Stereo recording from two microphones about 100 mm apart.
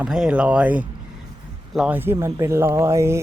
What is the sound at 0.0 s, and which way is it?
Speech, 5° right (ahead or behind).